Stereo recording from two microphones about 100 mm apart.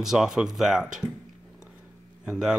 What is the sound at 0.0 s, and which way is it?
Speech, 5° right (ahead or behind).